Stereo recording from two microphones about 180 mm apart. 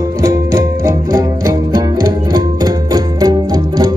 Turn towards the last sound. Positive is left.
turn(degrees=-20)  # may be behind; listen again after turning